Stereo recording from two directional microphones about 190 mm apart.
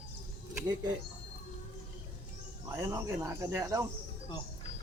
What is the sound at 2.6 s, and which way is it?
Speech, 15° right (ahead or behind).